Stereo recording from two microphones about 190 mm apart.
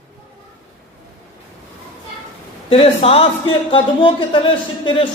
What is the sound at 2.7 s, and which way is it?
A man's voice, 30° left (ahead or behind).